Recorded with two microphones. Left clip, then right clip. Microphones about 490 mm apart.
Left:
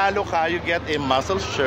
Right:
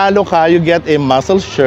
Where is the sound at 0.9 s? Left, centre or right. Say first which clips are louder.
Right 9 dB; right.